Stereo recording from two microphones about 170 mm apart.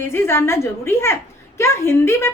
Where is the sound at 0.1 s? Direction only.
15° left (ahead or behind).